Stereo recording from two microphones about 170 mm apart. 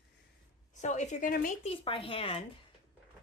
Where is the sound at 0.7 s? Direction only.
45° left (ahead or behind).